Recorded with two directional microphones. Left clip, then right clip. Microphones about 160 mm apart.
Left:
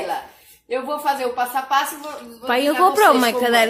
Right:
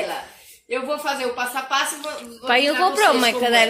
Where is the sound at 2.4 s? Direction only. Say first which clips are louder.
Left 1 dB; 25° left (ahead or behind).